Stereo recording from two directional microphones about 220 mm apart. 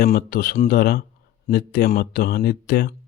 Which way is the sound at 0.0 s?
40° left (ahead or behind).